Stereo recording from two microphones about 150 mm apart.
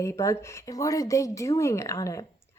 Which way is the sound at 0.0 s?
20° left (ahead or behind).